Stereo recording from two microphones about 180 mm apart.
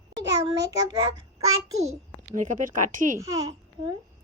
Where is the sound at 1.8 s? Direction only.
40° right (ahead or behind).